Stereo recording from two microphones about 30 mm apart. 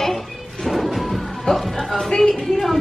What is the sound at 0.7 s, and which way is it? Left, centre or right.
Music, centre.